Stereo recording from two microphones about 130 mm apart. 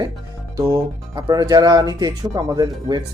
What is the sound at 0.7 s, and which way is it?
Speech, 30° right (ahead or behind).